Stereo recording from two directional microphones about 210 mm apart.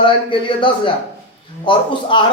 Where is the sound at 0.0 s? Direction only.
25° left (ahead or behind).